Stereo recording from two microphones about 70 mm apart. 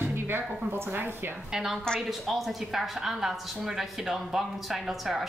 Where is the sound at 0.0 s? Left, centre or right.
Right.